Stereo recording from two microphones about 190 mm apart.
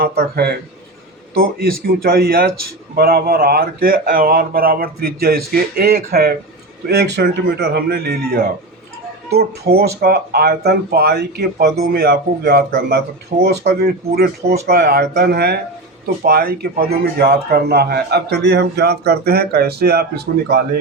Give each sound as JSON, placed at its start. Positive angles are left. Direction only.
{"t": 0.0, "sound": "a man's voice", "side_deg": -55}
{"t": 9.7, "sound": "a man's voice", "side_deg": -55}